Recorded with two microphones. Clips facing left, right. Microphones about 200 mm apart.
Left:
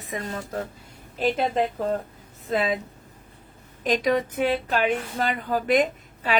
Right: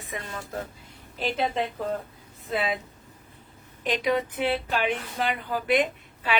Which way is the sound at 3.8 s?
45° left (ahead or behind).